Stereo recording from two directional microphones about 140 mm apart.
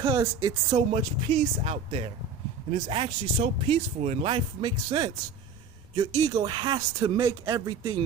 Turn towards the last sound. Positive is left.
turn(degrees=-25)  # may be behind; listen again after turning